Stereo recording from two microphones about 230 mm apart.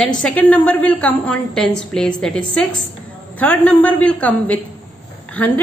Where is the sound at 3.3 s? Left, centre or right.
Centre.